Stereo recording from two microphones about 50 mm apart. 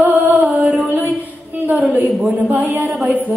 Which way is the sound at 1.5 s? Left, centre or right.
Right.